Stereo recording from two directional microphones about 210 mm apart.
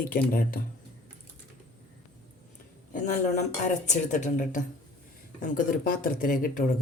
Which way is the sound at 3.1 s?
35° left (ahead or behind).